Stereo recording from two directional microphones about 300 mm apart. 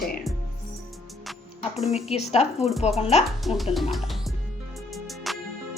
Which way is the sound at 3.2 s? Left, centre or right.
Centre.